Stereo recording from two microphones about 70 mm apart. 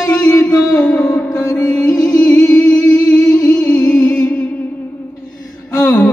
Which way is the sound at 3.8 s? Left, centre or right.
Centre.